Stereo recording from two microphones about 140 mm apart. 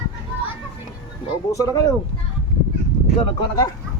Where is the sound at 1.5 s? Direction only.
25° left (ahead or behind).